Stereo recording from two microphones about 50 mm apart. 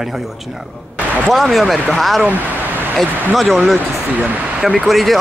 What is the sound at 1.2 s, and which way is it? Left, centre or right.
Speech, centre.